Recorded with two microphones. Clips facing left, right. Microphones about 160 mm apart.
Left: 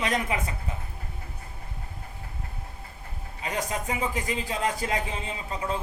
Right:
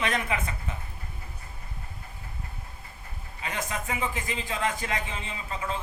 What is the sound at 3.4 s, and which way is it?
A man's voice, 35° left (ahead or behind).